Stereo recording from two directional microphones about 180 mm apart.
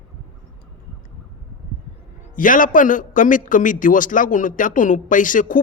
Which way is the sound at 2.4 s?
50° left (ahead or behind).